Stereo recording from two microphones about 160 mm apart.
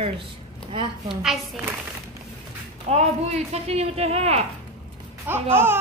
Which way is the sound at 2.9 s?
40° right (ahead or behind).